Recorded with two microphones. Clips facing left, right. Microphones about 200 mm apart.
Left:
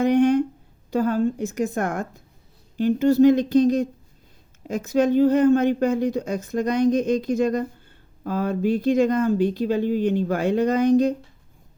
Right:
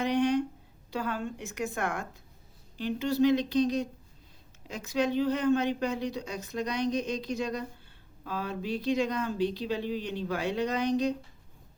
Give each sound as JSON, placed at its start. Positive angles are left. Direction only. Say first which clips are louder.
{"t": 0.0, "sound": "a woman's voice", "louder": "left 9 dB", "side_deg": 50}